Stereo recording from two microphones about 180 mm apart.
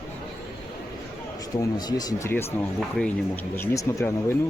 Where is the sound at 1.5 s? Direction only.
20° left (ahead or behind).